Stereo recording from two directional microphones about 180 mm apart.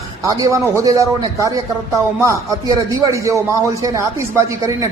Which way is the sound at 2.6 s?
20° right (ahead or behind).